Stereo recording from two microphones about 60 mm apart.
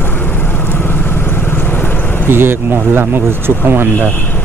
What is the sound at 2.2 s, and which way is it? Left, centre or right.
Speech, right.